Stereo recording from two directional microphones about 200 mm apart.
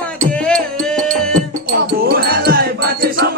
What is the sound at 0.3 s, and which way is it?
Music, 5° left (ahead or behind).